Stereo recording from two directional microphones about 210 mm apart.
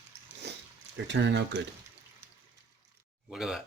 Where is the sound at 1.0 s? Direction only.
55° right (ahead or behind).